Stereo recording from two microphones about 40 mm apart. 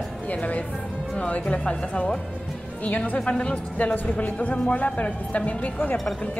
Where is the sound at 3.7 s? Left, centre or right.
Left.